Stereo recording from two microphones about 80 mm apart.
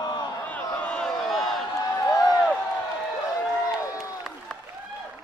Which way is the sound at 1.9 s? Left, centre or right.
Left.